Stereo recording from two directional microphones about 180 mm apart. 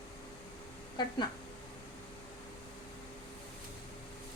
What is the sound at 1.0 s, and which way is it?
Speech, 25° left (ahead or behind).